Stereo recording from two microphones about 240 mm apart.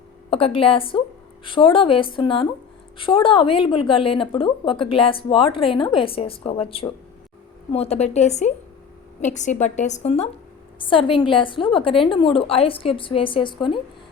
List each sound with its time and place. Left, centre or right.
0.3 s a woman's voice: left